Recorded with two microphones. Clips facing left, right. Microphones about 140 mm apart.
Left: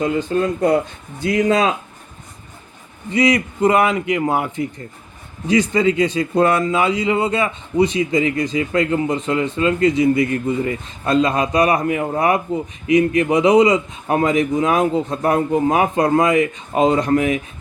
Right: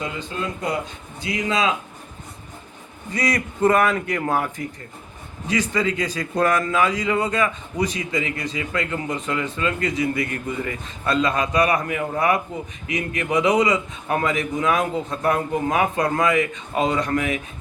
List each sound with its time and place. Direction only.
0.0 s speech: 45° left (ahead or behind)
3.2 s speech: 25° left (ahead or behind)
5.5 s a man's voice: 35° left (ahead or behind)